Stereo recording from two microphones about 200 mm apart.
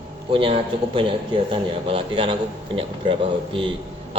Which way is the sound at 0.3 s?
25° right (ahead or behind).